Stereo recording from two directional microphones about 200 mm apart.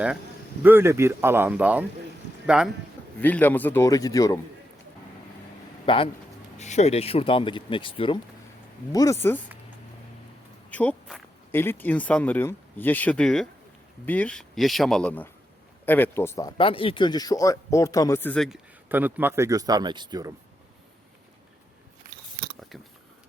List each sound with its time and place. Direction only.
0.6 s a man's voice: 10° right (ahead or behind)
3.2 s speech: 10° left (ahead or behind)
5.8 s speech: 25° left (ahead or behind)
8.9 s speech: 15° left (ahead or behind)
10.7 s a man's voice: 10° left (ahead or behind)
18.4 s speech: 5° right (ahead or behind)